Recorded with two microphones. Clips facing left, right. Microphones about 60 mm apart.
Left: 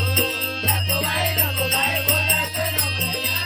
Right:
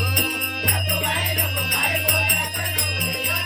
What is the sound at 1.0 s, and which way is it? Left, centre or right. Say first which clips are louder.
Music: left 1 dB; right.